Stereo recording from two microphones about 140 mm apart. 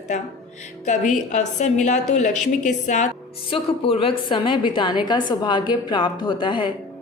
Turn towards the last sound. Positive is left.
turn(degrees=35)  # may be behind; listen again after turning